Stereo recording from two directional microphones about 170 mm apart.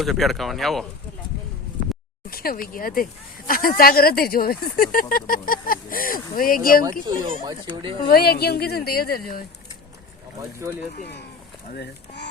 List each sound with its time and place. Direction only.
0.0 s speech: centre (ahead or behind)
2.3 s speech: 60° left (ahead or behind)
7.4 s speech: 25° right (ahead or behind)
8.1 s speech: 70° left (ahead or behind)
11.0 s speech: 80° left